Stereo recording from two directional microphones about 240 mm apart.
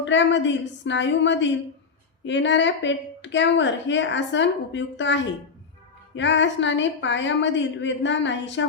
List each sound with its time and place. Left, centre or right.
0.0 s a woman's voice: left